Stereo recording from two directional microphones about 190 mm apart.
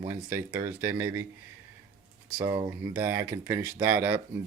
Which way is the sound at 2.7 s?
15° right (ahead or behind).